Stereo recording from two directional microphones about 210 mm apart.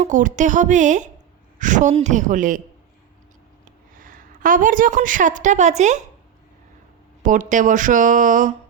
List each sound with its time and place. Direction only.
0.0 s speech: 35° right (ahead or behind)
3.9 s a woman's voice: 40° right (ahead or behind)
7.2 s speech: 40° right (ahead or behind)